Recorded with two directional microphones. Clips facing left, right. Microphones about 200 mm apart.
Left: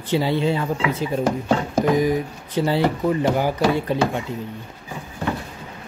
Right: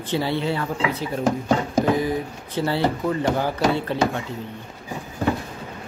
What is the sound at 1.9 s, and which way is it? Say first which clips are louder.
Speech: left 4 dB; 15° left (ahead or behind).